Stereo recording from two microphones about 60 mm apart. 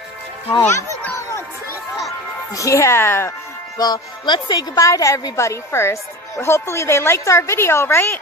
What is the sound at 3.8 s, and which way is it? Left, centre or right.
Speech, left.